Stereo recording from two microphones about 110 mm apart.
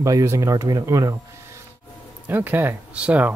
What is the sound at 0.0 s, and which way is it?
Speech, 25° right (ahead or behind).